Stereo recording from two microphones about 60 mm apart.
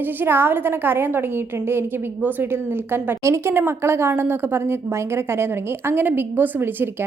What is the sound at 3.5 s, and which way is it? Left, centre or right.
A woman's voice, right.